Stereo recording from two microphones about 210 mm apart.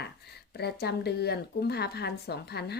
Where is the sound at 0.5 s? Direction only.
50° left (ahead or behind).